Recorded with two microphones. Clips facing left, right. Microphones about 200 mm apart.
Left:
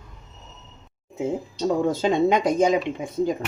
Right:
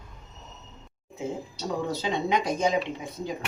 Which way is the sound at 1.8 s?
50° left (ahead or behind).